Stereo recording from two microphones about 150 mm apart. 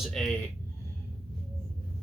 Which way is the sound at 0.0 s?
5° left (ahead or behind).